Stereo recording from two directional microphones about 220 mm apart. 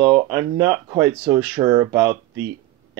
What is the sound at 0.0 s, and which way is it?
Speech, 10° right (ahead or behind).